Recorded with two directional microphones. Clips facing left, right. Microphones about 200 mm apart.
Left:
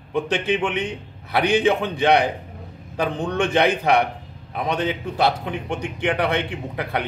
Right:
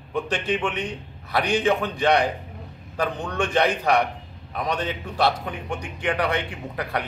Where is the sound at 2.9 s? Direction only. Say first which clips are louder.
Left 3 dB; 20° left (ahead or behind).